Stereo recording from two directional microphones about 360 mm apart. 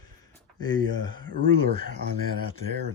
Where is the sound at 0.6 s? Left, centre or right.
Centre.